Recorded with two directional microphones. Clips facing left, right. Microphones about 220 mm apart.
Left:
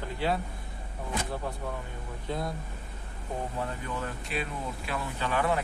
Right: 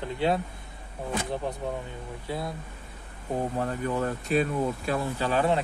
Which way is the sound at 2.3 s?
10° right (ahead or behind).